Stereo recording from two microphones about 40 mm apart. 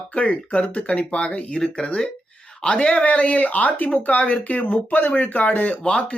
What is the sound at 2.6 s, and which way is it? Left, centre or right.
Speech, left.